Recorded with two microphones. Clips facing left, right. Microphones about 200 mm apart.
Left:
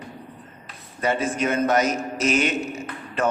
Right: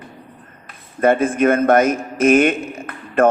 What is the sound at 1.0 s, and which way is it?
A man's voice, 55° right (ahead or behind).